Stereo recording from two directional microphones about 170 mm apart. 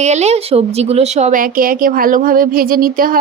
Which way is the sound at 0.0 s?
40° right (ahead or behind).